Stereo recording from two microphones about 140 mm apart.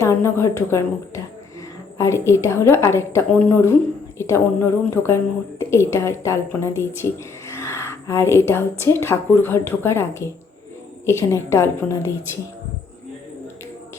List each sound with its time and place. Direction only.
0.0 s a woman's voice: 20° left (ahead or behind)